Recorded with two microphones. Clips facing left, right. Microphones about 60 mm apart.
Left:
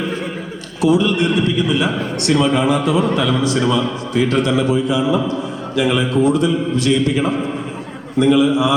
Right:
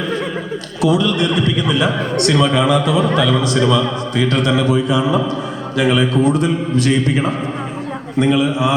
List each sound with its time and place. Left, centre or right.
0.8 s a man's voice: right